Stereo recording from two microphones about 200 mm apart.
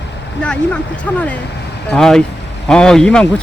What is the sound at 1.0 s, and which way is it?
Speech, 5° left (ahead or behind).